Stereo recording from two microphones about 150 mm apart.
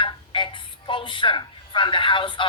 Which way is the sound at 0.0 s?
35° left (ahead or behind).